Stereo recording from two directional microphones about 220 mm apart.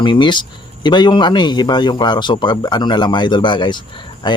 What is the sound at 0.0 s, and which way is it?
Speech, 20° left (ahead or behind).